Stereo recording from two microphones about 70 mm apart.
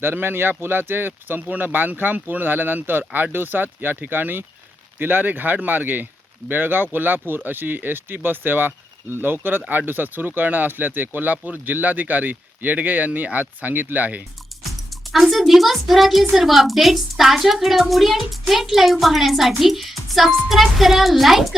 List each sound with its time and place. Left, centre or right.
0.0 s speech: right
14.8 s a child's voice: centre